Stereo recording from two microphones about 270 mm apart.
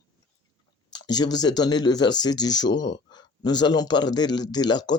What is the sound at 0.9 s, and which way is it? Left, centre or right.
Speech, centre.